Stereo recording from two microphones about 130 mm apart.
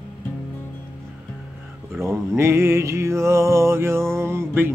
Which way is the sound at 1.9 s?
20° right (ahead or behind).